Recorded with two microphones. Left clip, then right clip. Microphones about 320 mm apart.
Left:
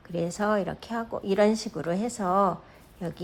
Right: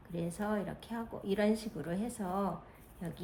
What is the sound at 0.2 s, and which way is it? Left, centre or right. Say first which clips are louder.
A woman's voice: left 11 dB; left.